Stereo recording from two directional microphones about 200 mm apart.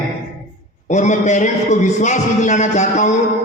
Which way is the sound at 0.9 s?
35° left (ahead or behind).